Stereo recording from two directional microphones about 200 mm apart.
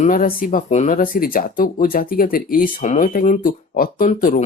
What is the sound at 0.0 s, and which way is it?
Speech, 45° left (ahead or behind).